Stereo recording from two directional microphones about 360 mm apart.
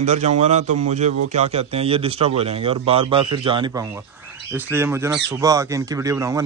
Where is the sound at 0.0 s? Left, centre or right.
Centre.